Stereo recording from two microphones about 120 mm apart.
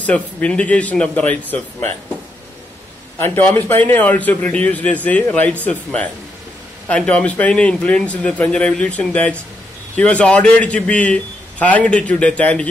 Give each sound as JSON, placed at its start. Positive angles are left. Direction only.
{"t": 0.0, "sound": "a man's voice", "side_deg": 10}
{"t": 3.2, "sound": "a man's voice", "side_deg": 20}